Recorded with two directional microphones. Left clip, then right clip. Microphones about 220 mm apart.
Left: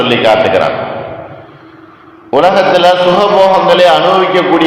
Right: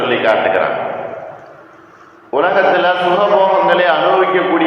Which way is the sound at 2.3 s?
50° left (ahead or behind).